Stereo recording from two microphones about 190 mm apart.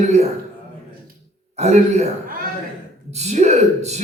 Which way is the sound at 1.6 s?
35° right (ahead or behind).